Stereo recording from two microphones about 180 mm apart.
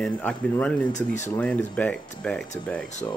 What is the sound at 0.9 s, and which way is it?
Speech, 40° left (ahead or behind).